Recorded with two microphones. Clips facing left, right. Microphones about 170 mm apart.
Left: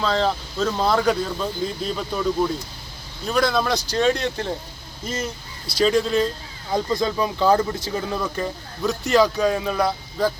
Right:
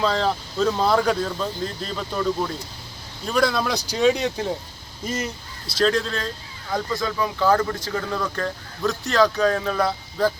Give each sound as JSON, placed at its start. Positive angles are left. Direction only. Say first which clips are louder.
{"t": 0.0, "sound": "speech", "louder": "even", "side_deg": 0}